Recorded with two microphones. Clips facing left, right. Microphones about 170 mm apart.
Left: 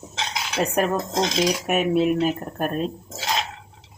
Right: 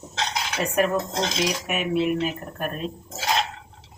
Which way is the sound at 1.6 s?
45° left (ahead or behind).